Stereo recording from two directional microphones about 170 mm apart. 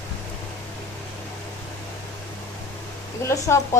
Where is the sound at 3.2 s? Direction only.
15° left (ahead or behind).